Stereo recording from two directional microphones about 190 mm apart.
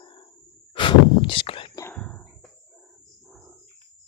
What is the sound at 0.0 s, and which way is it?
Breathing, 25° left (ahead or behind).